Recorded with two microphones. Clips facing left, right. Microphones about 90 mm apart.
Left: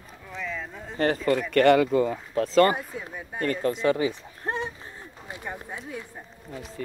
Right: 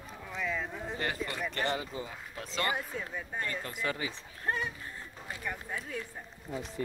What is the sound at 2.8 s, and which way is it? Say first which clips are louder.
Speech: left 2 dB; 10° left (ahead or behind).